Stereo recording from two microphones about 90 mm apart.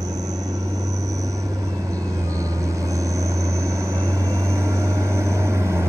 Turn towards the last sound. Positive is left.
turn(degrees=-30)  # may be behind; listen again after turning